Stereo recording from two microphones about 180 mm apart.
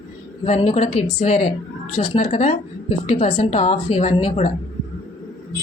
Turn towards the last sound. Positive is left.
turn(degrees=35)  # may be behind; listen again after turning